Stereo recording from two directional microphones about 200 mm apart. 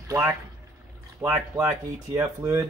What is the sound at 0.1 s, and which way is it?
Speech, 15° right (ahead or behind).